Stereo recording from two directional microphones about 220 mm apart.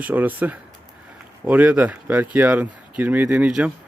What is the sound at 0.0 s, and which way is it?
Speech, 10° right (ahead or behind).